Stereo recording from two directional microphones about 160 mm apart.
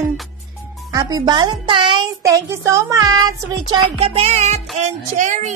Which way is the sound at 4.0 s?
40° right (ahead or behind).